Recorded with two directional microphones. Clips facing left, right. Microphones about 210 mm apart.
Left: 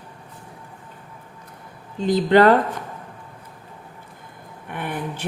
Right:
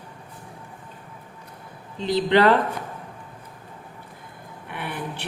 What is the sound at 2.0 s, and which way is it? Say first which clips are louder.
Speech: left 4 dB; 45° left (ahead or behind).